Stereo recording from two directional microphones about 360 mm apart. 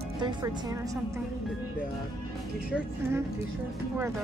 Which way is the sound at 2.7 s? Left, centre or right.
Centre.